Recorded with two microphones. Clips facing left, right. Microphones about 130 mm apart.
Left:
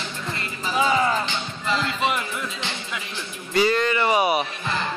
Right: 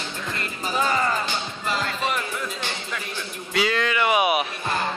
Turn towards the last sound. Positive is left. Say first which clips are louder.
# even
turn(degrees=-5)  # may be behind; listen again after turning